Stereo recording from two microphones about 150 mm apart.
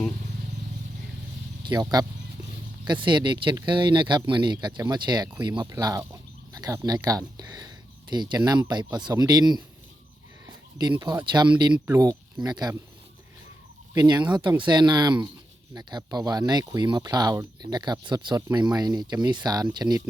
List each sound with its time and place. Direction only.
1.6 s speech: 25° right (ahead or behind)
10.4 s a sound: 30° right (ahead or behind)
11.3 s speech: 30° right (ahead or behind)
13.9 s speech: 30° right (ahead or behind)